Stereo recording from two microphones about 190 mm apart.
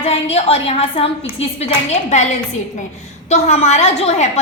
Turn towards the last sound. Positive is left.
turn(degrees=35)  # may be behind; listen again after turning